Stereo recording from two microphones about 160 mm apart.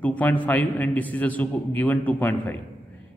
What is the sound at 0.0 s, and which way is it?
A man's voice, 10° left (ahead or behind).